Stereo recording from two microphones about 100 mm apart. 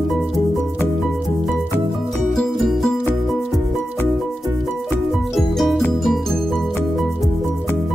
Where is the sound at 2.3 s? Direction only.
Centre (ahead or behind).